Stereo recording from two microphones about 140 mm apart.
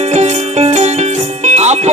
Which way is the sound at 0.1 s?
50° right (ahead or behind).